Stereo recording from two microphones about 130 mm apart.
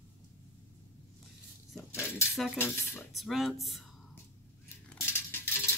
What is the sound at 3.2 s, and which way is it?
Speech, centre (ahead or behind).